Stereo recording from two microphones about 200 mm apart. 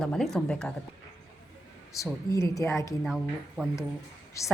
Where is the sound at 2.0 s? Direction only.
15° left (ahead or behind).